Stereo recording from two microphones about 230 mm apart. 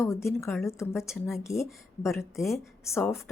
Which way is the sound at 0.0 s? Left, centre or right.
Centre.